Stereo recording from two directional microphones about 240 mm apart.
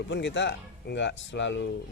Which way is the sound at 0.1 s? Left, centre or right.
Left.